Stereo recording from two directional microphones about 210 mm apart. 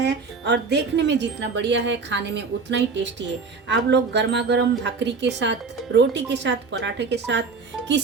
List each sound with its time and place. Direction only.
0.0 s speech: 55° right (ahead or behind)